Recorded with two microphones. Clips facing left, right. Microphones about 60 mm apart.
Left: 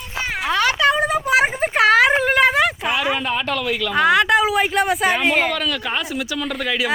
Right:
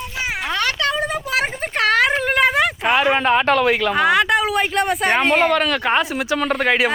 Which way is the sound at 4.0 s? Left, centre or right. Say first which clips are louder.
Left 5 dB; centre.